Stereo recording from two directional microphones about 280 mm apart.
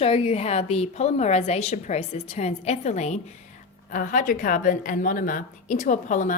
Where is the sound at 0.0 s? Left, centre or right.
Left.